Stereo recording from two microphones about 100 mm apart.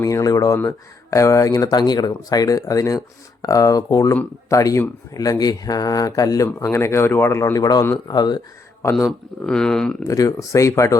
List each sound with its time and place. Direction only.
0.0 s speech: 35° left (ahead or behind)
8.8 s speech: 25° left (ahead or behind)
9.5 s speech: 5° left (ahead or behind)
10.1 s speech: 35° left (ahead or behind)